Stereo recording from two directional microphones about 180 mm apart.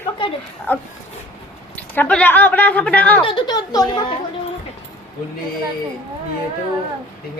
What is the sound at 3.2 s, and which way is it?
Speech, 25° left (ahead or behind).